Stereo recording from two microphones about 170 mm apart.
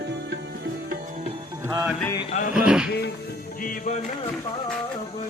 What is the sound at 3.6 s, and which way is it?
Music, 50° left (ahead or behind).